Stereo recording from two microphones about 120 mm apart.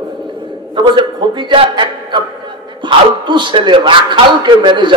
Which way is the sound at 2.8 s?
45° right (ahead or behind).